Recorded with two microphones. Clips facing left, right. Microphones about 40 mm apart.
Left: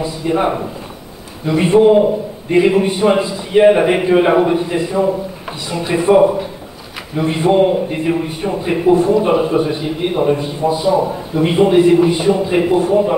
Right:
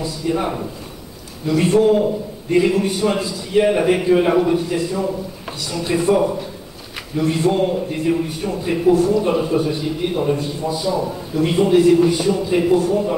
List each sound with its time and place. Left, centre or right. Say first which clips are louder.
0.0 s a man's voice: left 5 dB; left